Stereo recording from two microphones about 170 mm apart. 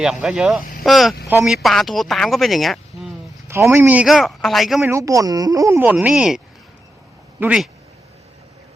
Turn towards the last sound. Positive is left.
turn(degrees=-5)  # may be behind; listen again after turning